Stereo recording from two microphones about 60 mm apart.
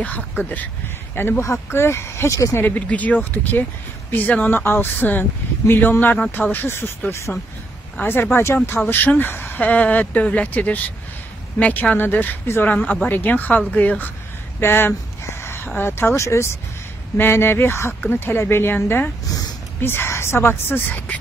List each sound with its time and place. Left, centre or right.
0.4 s speech: left
1.4 s speech: left
2.6 s speech: left
7.1 s speech: left
8.0 s speech: left
14.6 s speech: left
17.2 s speech: left